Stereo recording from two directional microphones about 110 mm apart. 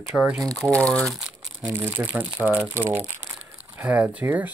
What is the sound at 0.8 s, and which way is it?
Speech, 10° left (ahead or behind).